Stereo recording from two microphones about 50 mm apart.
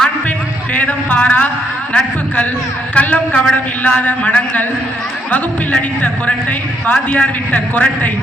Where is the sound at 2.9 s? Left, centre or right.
Left.